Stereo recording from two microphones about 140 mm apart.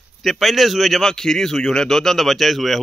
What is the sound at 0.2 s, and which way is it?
A man's voice, centre (ahead or behind).